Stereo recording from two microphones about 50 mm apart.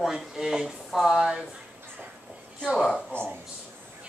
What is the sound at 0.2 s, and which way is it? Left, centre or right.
A man's voice, centre.